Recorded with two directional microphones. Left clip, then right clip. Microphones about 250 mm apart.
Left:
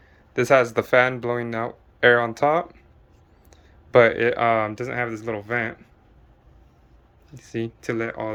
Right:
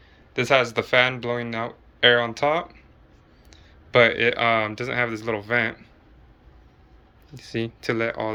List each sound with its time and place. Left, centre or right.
0.3 s speech: left
7.3 s speech: centre